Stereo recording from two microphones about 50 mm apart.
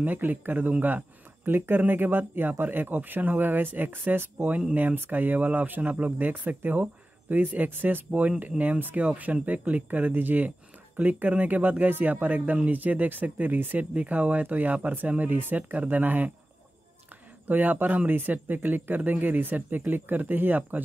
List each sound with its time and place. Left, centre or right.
0.0 s speech: right
17.5 s speech: right